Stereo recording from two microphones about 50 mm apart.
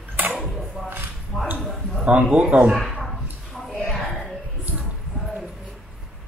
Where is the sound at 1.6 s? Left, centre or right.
Centre.